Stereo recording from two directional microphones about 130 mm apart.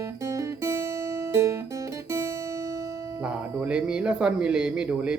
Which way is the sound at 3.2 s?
10° right (ahead or behind).